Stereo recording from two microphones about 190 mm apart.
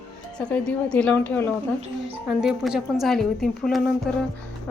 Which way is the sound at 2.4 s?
5° right (ahead or behind).